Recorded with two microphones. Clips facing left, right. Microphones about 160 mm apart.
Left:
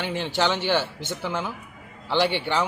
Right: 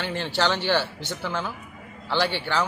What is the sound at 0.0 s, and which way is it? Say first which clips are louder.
A man's voice: left 1 dB; 15° left (ahead or behind).